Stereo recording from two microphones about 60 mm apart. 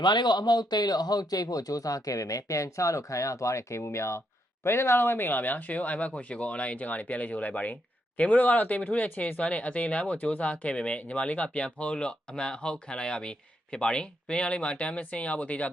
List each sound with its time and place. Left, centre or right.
0.9 s speech: left